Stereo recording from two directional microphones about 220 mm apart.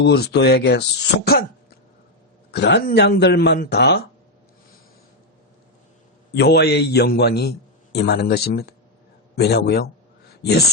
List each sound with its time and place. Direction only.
0.0 s speech: 50° left (ahead or behind)
2.5 s speech: 50° left (ahead or behind)
6.3 s speech: 45° left (ahead or behind)